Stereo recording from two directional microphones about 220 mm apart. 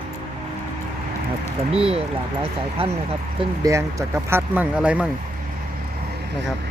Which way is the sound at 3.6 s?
15° right (ahead or behind).